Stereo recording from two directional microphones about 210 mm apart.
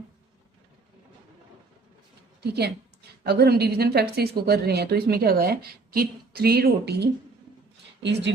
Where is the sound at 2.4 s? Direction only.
50° right (ahead or behind).